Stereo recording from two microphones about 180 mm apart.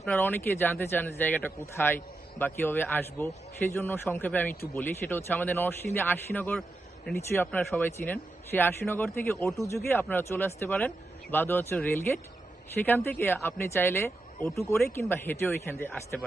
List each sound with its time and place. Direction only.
0.0 s speech: 10° left (ahead or behind)
7.2 s speech: 15° left (ahead or behind)